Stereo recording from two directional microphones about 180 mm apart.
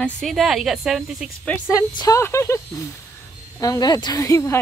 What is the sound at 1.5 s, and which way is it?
A woman's voice, 20° left (ahead or behind).